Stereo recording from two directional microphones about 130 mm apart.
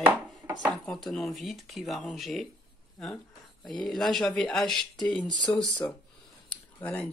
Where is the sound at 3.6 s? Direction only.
5° left (ahead or behind).